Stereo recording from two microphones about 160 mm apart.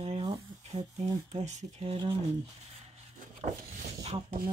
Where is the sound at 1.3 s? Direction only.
45° right (ahead or behind).